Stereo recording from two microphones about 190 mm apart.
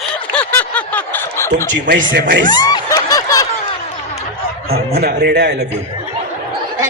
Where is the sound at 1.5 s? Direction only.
45° right (ahead or behind).